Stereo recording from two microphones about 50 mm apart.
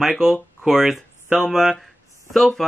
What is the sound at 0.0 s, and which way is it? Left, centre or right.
Speech, centre.